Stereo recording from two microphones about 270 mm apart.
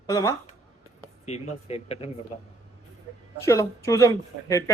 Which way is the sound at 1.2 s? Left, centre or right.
Left.